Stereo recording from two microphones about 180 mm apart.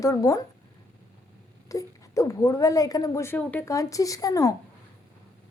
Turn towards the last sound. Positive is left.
turn(degrees=20)  # may be behind; listen again after turning